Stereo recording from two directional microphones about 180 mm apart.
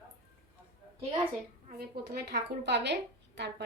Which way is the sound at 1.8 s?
65° right (ahead or behind).